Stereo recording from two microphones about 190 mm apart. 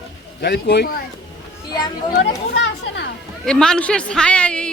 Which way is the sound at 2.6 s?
80° left.